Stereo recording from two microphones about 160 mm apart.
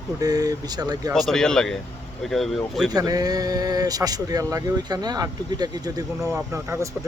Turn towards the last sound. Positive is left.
turn(degrees=-15)  # may be behind; listen again after turning